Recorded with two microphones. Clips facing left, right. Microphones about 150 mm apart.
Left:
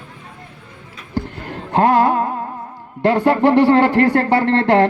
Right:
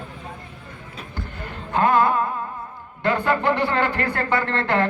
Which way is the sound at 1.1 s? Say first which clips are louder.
Left 10 dB; 75° left (ahead or behind).